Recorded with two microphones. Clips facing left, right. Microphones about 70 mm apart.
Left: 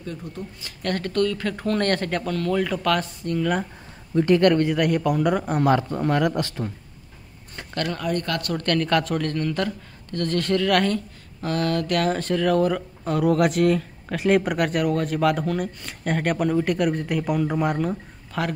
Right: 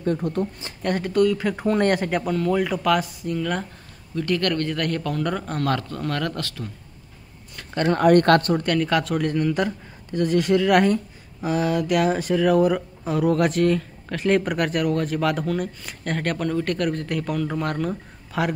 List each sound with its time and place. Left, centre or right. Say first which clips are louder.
0.0 s speech: right 10 dB; right
0.8 s speech: right 3 dB; centre
4.1 s speech: left 6 dB; left
7.9 s speech: right 13 dB; right
8.5 s speech: even; centre
18.3 s speech: right 2 dB; centre